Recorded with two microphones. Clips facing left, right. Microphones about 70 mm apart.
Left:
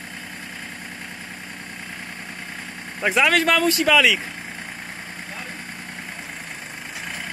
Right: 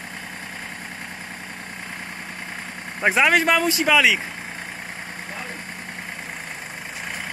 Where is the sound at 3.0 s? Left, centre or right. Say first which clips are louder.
Right 1 dB; right.